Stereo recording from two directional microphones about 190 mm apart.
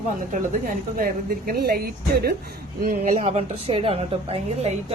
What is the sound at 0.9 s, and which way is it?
A woman's voice, 50° right (ahead or behind).